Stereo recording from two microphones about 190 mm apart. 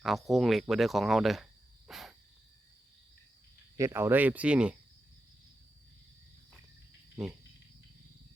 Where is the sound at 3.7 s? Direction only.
15° right (ahead or behind).